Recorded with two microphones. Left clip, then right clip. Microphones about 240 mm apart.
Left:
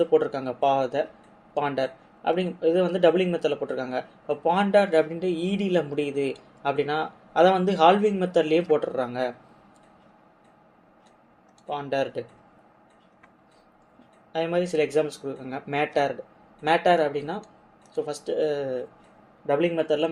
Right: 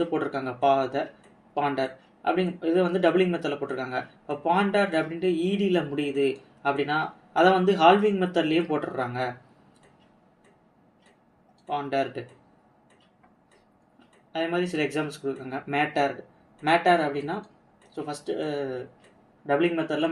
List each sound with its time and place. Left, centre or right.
0.1 s speech: left
11.7 s speech: left
14.3 s speech: left